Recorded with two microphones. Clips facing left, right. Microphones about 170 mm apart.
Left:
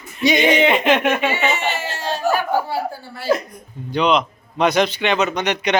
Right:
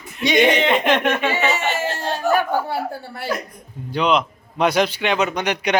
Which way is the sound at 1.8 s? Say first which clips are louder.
Even; 55° right (ahead or behind).